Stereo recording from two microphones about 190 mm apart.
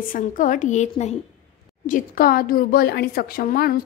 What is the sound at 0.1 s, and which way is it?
A woman's voice, 45° left (ahead or behind).